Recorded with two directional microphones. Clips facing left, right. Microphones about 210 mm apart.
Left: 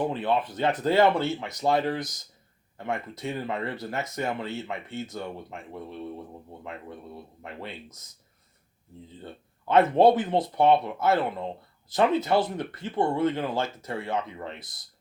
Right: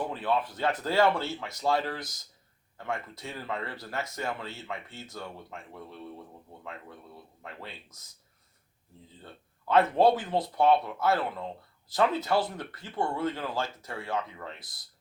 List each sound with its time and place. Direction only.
0.0 s speech: 20° left (ahead or behind)
9.2 s speech: 20° left (ahead or behind)